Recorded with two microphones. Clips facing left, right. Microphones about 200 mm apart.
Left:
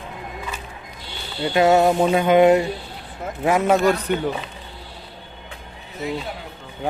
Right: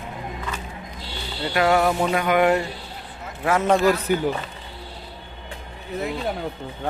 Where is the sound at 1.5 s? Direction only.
25° left (ahead or behind).